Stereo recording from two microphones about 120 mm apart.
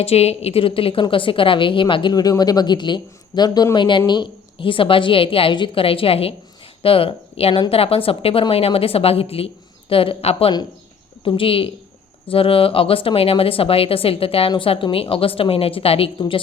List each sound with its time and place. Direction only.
0.0 s a woman's voice: 60° left (ahead or behind)